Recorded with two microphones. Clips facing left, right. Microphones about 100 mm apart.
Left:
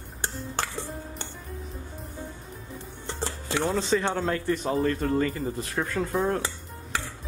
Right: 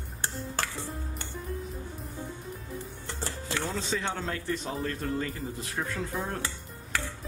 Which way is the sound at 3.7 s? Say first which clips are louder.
Left 7 dB; 50° left (ahead or behind).